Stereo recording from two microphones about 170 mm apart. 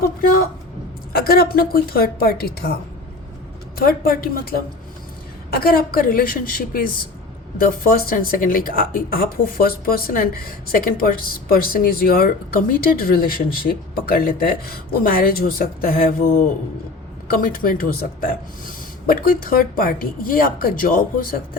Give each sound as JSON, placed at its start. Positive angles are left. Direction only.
{"t": 1.1, "sound": "speech", "side_deg": 65}
{"t": 3.8, "sound": "speech", "side_deg": 60}